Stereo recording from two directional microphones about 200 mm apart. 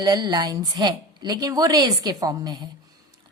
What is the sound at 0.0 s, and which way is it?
A woman's voice, 20° right (ahead or behind).